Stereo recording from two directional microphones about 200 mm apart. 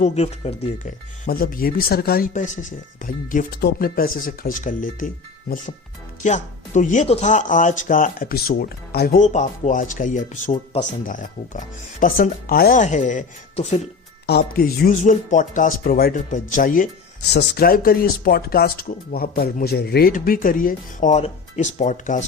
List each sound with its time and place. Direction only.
0.0 s speech: 30° left (ahead or behind)
6.2 s speech: 35° left (ahead or behind)
11.0 s speech: 40° left (ahead or behind)
14.3 s speech: 50° left (ahead or behind)
17.3 s speech: 55° left (ahead or behind)